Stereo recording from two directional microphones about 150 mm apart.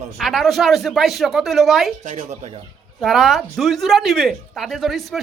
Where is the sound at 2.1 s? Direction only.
45° right (ahead or behind).